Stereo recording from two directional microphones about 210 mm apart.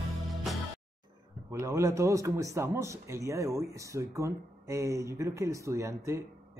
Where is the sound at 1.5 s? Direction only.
15° right (ahead or behind).